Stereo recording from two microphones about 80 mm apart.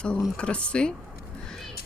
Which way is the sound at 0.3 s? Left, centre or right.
Centre.